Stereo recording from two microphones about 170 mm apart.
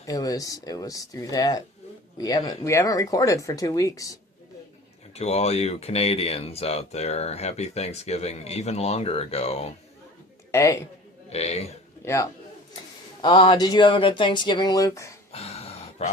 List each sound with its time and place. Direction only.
0.0 s speech: 20° left (ahead or behind)
5.1 s speech: 40° left (ahead or behind)
10.5 s a man's voice: 15° left (ahead or behind)
11.3 s speech: 40° left (ahead or behind)
12.0 s a man's voice: 15° left (ahead or behind)
13.2 s speech: 30° left (ahead or behind)
15.3 s a sound: 35° left (ahead or behind)